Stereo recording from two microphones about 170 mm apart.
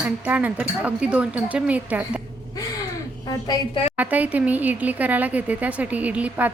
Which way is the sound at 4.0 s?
10° right (ahead or behind).